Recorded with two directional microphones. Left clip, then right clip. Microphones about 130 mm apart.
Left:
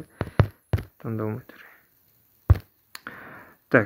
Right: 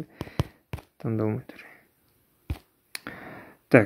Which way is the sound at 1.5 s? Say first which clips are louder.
Right 1 dB; 40° right (ahead or behind).